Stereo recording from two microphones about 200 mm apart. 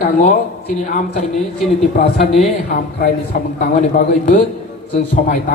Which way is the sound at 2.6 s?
45° left (ahead or behind).